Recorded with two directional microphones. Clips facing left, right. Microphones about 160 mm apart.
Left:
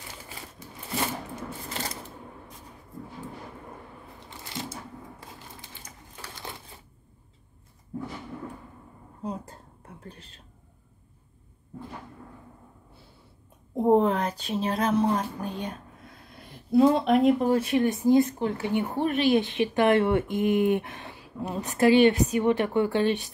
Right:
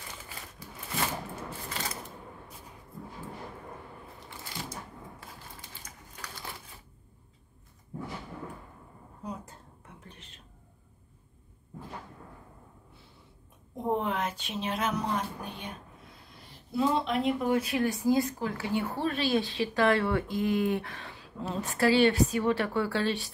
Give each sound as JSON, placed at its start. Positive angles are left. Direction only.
{"t": 9.2, "sound": "whispering", "side_deg": 30}
{"t": 13.7, "sound": "a sound", "side_deg": 40}
{"t": 16.3, "sound": "speech", "side_deg": 55}
{"t": 17.6, "sound": "speech", "side_deg": 25}